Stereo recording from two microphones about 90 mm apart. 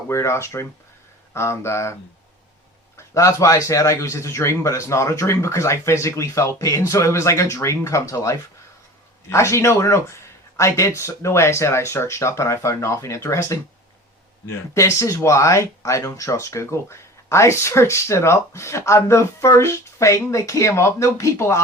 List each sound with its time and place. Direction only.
0.1 s speech: 30° left (ahead or behind)
3.2 s speech: 35° left (ahead or behind)